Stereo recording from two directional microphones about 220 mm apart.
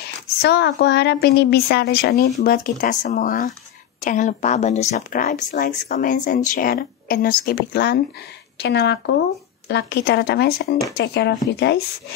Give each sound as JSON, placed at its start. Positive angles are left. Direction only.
{"t": 0.4, "sound": "a woman's voice", "side_deg": 50}